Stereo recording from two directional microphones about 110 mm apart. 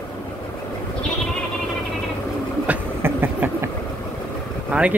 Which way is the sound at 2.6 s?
15° right (ahead or behind).